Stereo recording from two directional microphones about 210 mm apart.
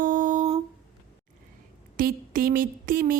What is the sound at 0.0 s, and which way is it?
Humming, 40° right (ahead or behind).